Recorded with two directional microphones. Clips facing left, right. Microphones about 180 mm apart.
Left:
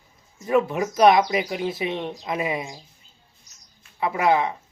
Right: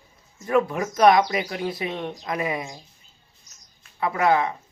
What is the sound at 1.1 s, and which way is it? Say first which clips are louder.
Speech: even; 20° left (ahead or behind).